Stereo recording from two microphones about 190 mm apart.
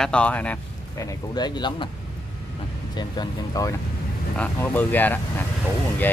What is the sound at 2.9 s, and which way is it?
Speech, 20° left (ahead or behind).